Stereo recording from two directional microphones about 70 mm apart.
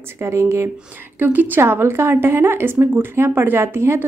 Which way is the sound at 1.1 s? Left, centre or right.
Right.